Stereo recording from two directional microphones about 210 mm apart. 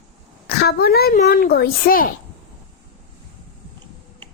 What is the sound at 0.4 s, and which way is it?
A woman's voice, 45° left (ahead or behind).